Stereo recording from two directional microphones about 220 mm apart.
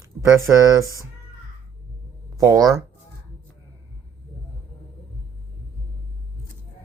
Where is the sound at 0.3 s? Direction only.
15° right (ahead or behind).